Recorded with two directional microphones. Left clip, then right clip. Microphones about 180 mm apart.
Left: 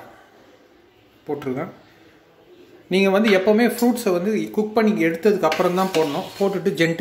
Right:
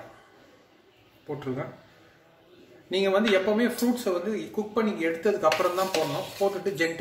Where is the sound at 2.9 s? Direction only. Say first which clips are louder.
Left 6 dB; 35° left (ahead or behind).